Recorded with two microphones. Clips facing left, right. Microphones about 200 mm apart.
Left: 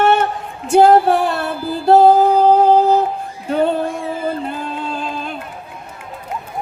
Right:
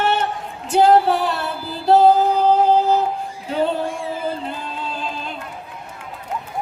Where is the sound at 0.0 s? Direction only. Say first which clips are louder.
Left 6 dB; 50° left (ahead or behind).